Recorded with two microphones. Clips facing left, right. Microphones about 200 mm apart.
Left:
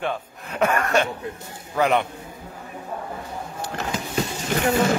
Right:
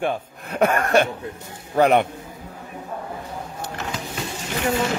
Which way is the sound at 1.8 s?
40° right (ahead or behind).